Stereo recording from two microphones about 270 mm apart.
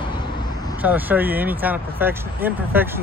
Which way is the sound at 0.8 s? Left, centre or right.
Centre.